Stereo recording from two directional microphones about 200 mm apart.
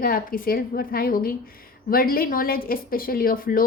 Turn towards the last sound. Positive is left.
turn(degrees=45)  # may be behind; listen again after turning